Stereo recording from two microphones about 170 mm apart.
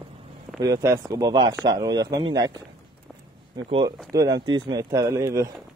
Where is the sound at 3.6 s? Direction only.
30° right (ahead or behind).